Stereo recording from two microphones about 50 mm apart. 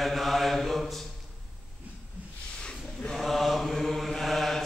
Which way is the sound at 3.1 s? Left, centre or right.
Centre.